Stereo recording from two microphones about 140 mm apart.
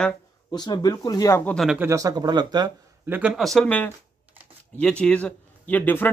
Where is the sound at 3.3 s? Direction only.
Centre (ahead or behind).